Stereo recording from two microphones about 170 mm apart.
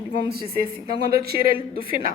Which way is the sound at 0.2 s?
70° right (ahead or behind).